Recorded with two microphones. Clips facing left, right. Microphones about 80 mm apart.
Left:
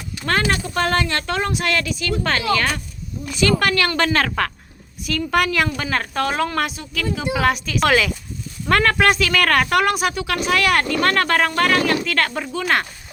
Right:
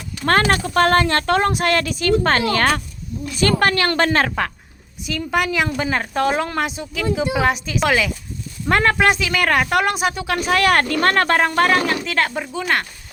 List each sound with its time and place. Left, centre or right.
0.3 s speech: right
5.0 s speech: centre
7.8 s speech: centre
8.7 s speech: right